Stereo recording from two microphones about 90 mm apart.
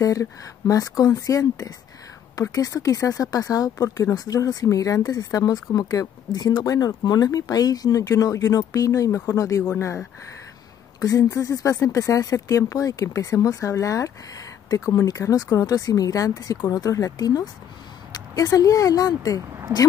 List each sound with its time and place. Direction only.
0.0 s speech: 40° left (ahead or behind)